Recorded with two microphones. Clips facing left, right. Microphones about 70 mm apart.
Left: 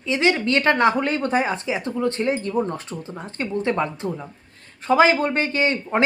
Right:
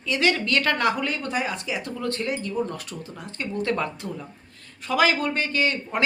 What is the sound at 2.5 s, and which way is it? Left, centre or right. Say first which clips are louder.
Speech: left 4 dB; left.